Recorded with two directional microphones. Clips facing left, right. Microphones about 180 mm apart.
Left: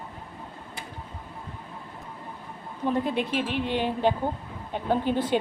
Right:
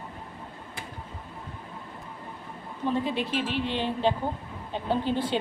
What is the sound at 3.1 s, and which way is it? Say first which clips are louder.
Speech: left 1 dB; 50° left (ahead or behind).